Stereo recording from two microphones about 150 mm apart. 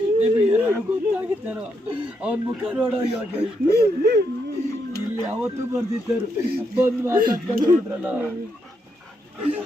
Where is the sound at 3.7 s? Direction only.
90° right.